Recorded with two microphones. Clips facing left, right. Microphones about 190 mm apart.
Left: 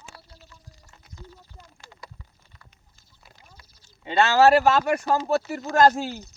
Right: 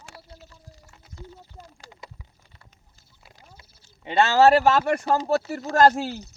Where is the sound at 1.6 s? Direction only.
45° right (ahead or behind).